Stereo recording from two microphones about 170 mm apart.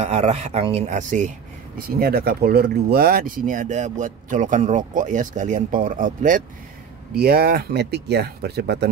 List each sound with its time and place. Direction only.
0.0 s speech: 40° right (ahead or behind)
1.8 s speech: 60° right (ahead or behind)
7.2 s speech: 65° right (ahead or behind)